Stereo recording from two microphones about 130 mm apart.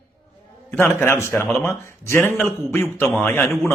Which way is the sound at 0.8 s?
20° left (ahead or behind).